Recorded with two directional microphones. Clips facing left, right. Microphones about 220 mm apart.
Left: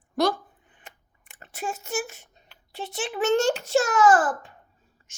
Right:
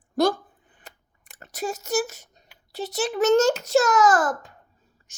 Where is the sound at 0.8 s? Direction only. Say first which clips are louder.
Right 1 dB; 40° right (ahead or behind).